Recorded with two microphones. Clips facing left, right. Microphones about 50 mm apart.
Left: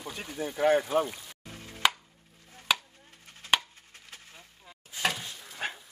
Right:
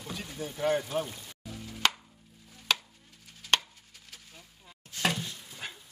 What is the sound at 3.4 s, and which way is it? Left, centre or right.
Chopping, left.